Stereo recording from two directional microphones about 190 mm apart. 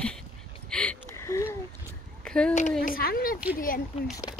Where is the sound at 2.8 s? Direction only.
50° left (ahead or behind).